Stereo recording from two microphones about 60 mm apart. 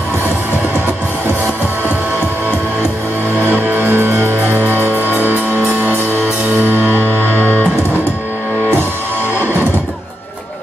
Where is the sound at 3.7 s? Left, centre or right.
Right.